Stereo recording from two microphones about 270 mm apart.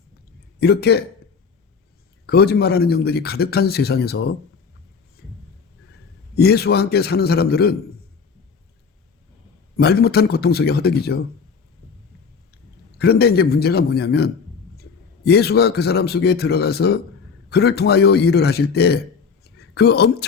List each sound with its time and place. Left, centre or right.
0.6 s a man's voice: left
2.2 s a man's voice: left
5.2 s a sound: left
6.3 s a man's voice: left
9.7 s a man's voice: left
13.0 s a man's voice: left
19.5 s a sound: left